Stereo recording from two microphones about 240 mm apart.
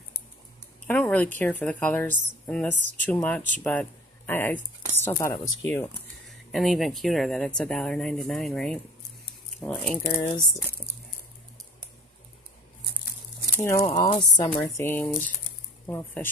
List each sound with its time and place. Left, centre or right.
0.8 s a woman's voice: centre
6.2 s a woman's voice: centre
13.7 s a woman's voice: centre